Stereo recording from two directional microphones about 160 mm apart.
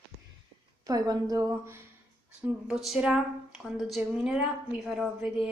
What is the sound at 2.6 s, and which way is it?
A woman's voice, centre (ahead or behind).